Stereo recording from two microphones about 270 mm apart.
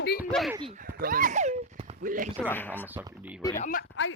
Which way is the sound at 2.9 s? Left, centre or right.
Centre.